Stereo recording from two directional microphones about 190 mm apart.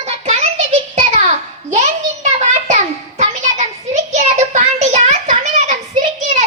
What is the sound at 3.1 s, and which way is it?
Child singing, 40° right (ahead or behind).